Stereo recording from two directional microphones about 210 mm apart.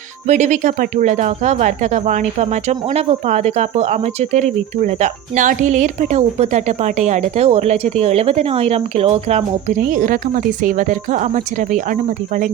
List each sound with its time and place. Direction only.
0.3 s speech: 35° right (ahead or behind)